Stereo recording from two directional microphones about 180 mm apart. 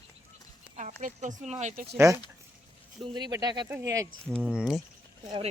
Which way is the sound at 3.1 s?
25° right (ahead or behind).